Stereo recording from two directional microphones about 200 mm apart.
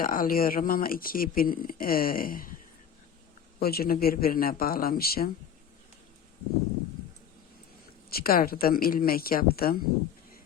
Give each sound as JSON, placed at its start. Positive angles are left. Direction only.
{"t": 0.0, "sound": "speech", "side_deg": 45}
{"t": 3.6, "sound": "speech", "side_deg": 50}
{"t": 8.1, "sound": "speech", "side_deg": 50}